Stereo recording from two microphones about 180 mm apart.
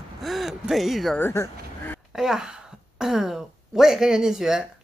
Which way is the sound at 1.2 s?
15° left (ahead or behind).